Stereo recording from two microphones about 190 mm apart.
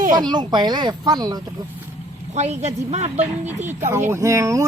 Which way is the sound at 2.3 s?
35° right (ahead or behind).